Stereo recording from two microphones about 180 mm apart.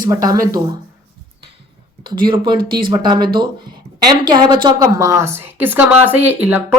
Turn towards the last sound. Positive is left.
turn(degrees=-10)  # may be behind; listen again after turning